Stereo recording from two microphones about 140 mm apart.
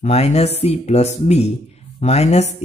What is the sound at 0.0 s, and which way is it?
Speech, 50° left (ahead or behind).